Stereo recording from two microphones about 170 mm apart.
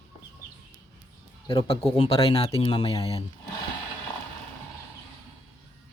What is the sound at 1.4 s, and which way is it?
Speech, 30° left (ahead or behind).